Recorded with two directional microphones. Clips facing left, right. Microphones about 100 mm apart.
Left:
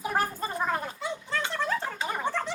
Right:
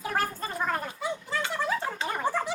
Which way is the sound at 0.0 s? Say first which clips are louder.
Left 1 dB; 15° left (ahead or behind).